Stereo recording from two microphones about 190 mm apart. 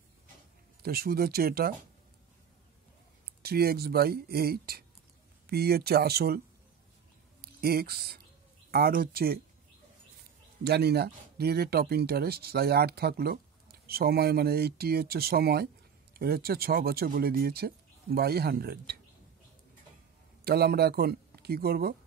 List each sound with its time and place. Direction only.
0.8 s speech: 55° right (ahead or behind)
3.4 s speech: 55° right (ahead or behind)
7.6 s speech: 55° right (ahead or behind)
10.6 s speech: 60° right (ahead or behind)
20.4 s speech: 55° right (ahead or behind)